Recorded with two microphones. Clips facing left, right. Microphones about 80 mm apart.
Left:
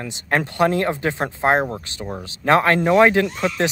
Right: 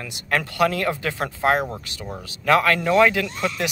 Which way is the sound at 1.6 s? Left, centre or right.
Centre.